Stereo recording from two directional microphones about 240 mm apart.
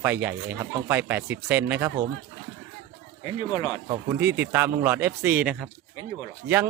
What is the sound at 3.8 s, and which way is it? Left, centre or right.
Speech, centre.